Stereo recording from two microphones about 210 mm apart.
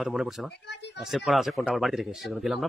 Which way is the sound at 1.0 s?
Centre (ahead or behind).